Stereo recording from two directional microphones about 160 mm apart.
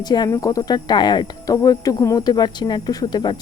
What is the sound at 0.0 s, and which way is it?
Speech, 25° left (ahead or behind).